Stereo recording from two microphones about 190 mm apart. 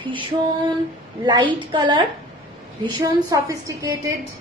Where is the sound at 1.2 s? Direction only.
25° right (ahead or behind).